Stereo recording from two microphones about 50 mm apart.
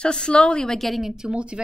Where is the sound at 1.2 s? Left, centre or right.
Centre.